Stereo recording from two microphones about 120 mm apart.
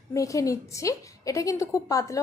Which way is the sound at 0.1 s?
25° left (ahead or behind).